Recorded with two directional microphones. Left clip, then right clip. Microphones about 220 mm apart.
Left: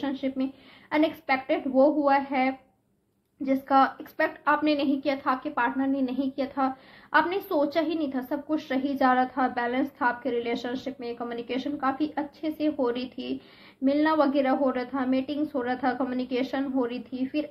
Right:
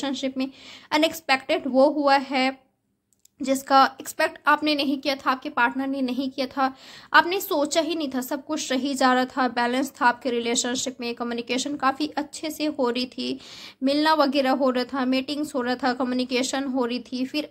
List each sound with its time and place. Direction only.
0.0 s a woman's voice: 40° right (ahead or behind)